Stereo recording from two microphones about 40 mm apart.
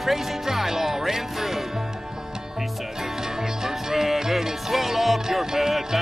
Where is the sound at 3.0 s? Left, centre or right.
Centre.